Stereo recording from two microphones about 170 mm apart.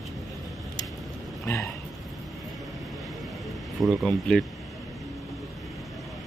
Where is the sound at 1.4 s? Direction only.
15° left (ahead or behind).